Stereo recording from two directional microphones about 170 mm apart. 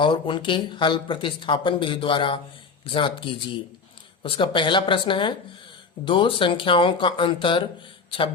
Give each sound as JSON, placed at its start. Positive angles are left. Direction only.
{"t": 0.0, "sound": "speech", "side_deg": 30}